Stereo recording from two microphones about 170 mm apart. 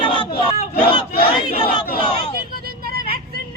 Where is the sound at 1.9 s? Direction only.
30° left (ahead or behind).